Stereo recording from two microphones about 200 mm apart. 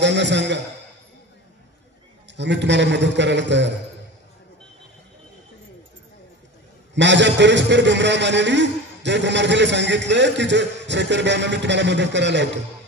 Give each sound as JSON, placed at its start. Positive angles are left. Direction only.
{"t": 0.0, "sound": "a man's voice", "side_deg": -60}
{"t": 2.3, "sound": "a man's voice", "side_deg": -60}
{"t": 7.0, "sound": "a man's voice", "side_deg": -60}